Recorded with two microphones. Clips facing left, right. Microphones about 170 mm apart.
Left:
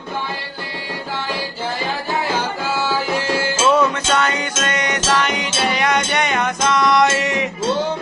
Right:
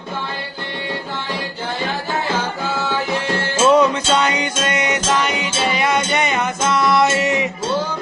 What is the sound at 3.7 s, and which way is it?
Music, 15° right (ahead or behind).